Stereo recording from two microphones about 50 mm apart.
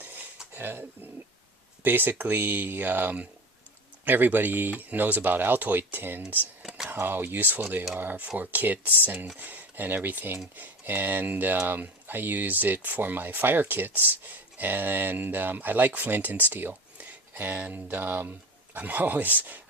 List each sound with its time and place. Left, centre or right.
0.5 s speech: right